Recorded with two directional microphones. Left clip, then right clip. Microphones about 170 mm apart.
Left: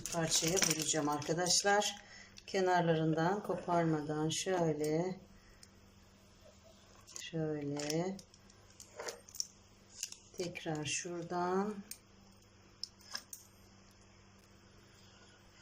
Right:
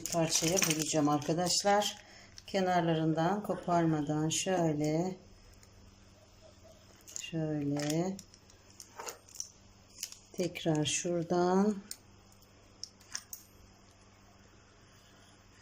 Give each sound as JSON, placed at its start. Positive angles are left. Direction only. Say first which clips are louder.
{"t": 0.0, "sound": "speech", "louder": "right 4 dB", "side_deg": -5}
{"t": 7.3, "sound": "speech", "louder": "right 3 dB", "side_deg": -5}
{"t": 9.1, "sound": "a sound", "louder": "left 2 dB", "side_deg": 10}
{"t": 10.3, "sound": "speech", "louder": "right 8 dB", "side_deg": -20}